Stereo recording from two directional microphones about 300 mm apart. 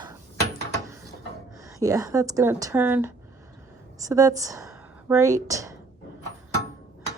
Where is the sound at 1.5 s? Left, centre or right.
Centre.